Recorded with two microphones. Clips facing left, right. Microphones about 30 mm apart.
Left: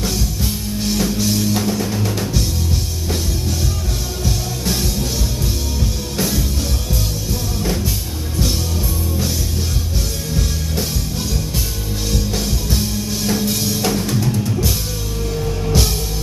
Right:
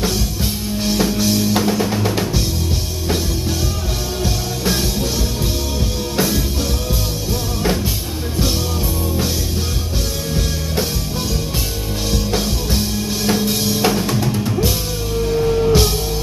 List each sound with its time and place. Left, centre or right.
0.0 s music: centre
1.7 s music: right
4.8 s music: centre
12.1 s music: centre